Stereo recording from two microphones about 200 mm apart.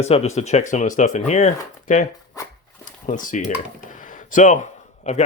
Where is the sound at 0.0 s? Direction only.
30° left (ahead or behind).